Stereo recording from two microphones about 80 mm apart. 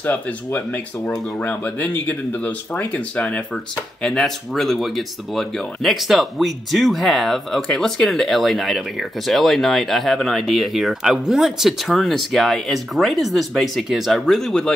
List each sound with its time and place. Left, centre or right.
0.0 s speech: left
4.0 s speech: centre